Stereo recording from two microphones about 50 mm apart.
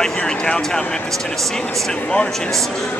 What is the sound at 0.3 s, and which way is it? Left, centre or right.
Speech, centre.